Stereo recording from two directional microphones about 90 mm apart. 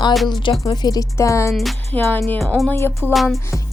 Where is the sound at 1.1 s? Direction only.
35° left (ahead or behind).